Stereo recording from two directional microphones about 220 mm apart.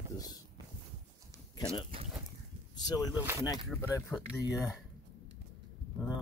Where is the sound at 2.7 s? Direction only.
15° left (ahead or behind).